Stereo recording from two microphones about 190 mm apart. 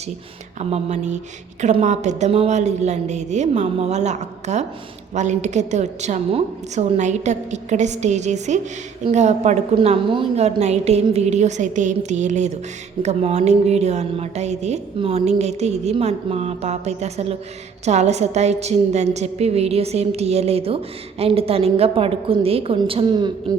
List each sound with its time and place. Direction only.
0.6 s a woman's voice: 35° right (ahead or behind)